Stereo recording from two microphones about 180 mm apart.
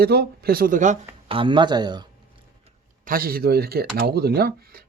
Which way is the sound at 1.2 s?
30° right (ahead or behind).